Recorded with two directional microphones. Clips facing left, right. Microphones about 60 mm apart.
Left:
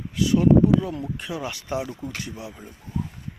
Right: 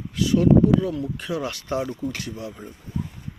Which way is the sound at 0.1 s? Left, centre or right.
Centre.